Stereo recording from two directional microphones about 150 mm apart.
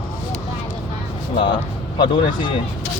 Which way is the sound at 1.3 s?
35° left (ahead or behind).